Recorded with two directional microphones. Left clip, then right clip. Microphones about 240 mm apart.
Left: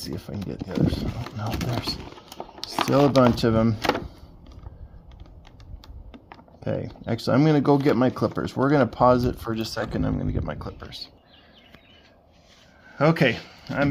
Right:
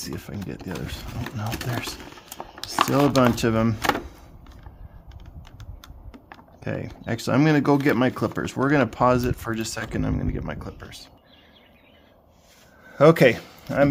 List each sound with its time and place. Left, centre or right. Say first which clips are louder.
0.0 s speech: even; centre
2.6 s a sound: right 1 dB; centre
3.1 s speech: left 1 dB; centre
3.3 s speech: left 1 dB; centre
6.6 s speech: left 2 dB; centre
12.9 s speech: right 6 dB; right